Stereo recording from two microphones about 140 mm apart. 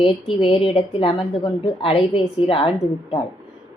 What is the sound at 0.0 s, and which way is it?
A woman's voice, 40° left (ahead or behind).